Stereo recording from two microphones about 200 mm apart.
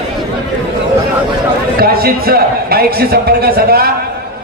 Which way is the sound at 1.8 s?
50° right (ahead or behind).